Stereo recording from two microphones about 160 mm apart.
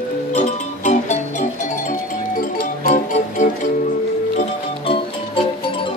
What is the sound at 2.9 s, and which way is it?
Music, 55° left (ahead or behind).